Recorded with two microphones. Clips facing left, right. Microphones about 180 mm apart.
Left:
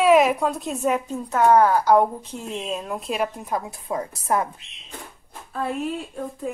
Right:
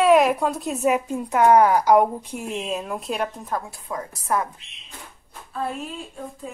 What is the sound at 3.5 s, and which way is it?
A woman's voice, 15° left (ahead or behind).